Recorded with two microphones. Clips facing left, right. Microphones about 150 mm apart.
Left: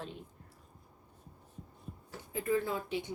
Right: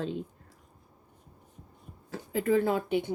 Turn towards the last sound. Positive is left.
turn(degrees=-60)  # may be behind; listen again after turning